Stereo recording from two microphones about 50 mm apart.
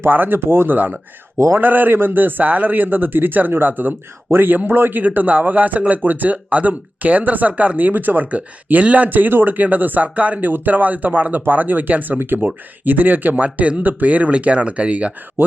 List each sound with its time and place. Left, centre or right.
0.0 s speech: right
0.3 s speech: right
1.5 s a man's voice: right
15.4 s speech: right